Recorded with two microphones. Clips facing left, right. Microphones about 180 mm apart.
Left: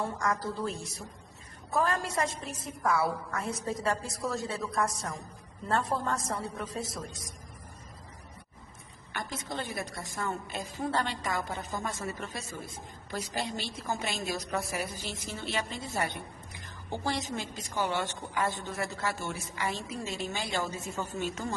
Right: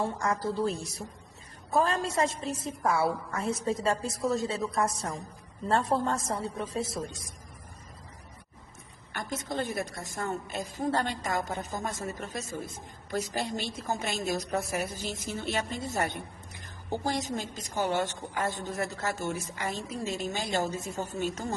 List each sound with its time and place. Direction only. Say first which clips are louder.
0.2 s a woman's voice: right 3 dB; 30° right (ahead or behind)
9.1 s a woman's voice: right 4 dB; 45° right (ahead or behind)
16.9 s a woman's voice: right 2 dB; 45° right (ahead or behind)